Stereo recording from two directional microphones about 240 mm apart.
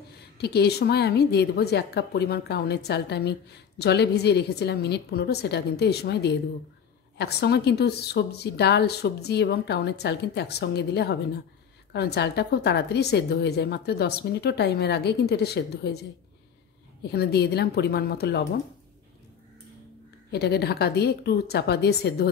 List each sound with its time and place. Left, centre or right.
0.4 s a woman's voice: left
17.1 s a woman's voice: left
20.2 s a woman's voice: left